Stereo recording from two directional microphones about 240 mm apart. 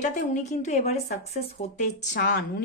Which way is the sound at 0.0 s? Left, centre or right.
Left.